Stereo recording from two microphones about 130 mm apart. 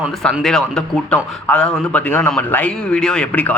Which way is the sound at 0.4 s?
5° left (ahead or behind).